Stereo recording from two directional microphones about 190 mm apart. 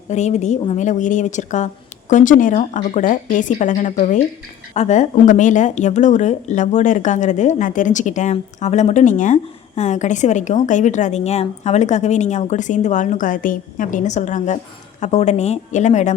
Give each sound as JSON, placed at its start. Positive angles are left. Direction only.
{"t": 0.1, "sound": "speech", "side_deg": 35}